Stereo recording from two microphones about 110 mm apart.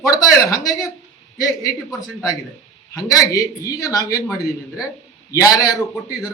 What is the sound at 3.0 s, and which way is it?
A man's voice, 35° left (ahead or behind).